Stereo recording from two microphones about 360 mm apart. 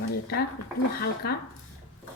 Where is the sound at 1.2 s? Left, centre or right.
Left.